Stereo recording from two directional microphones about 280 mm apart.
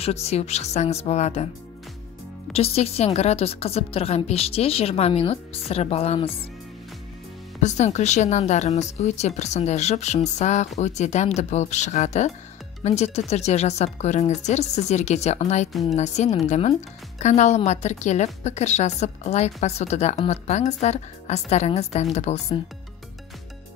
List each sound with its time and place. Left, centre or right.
0.0 s a woman's voice: left
2.5 s a woman's voice: left
7.6 s a woman's voice: left
15.7 s a woman's voice: centre
16.0 s a woman's voice: left